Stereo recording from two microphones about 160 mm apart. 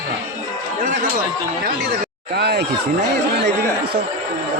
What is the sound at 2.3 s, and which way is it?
Speech, 90° right.